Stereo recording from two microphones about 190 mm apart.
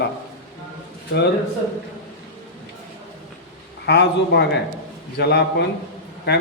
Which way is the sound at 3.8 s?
60° left (ahead or behind).